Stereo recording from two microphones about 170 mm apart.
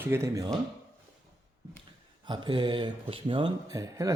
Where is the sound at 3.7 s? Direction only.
20° right (ahead or behind).